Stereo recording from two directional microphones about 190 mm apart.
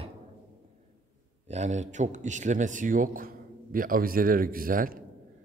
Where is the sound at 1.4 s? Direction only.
35° right (ahead or behind).